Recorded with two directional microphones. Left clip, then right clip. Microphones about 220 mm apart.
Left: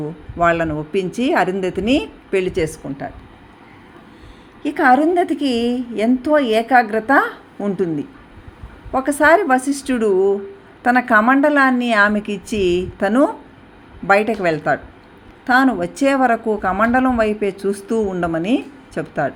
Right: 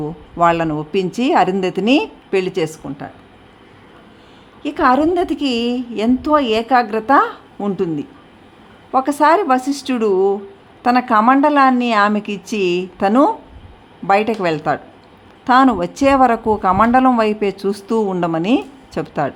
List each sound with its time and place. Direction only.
0.0 s a woman's voice: 15° right (ahead or behind)
4.6 s a woman's voice: 10° right (ahead or behind)